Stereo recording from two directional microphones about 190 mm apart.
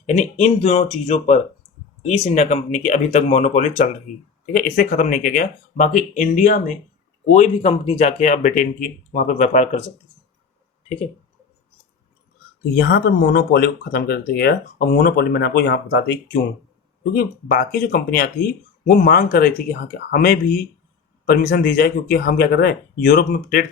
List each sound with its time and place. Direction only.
0.0 s speech: 35° left (ahead or behind)
12.9 s speech: 55° left (ahead or behind)
17.2 s speech: 50° left (ahead or behind)